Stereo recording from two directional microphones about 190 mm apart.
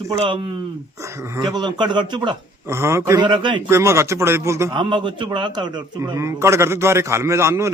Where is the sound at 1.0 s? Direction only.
15° right (ahead or behind).